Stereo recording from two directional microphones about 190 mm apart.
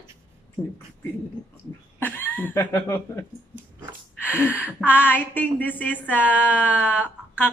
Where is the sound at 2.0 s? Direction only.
10° left (ahead or behind).